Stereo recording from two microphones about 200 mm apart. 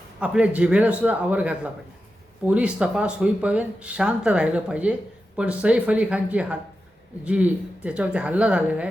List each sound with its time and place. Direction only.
0.2 s speech: 5° right (ahead or behind)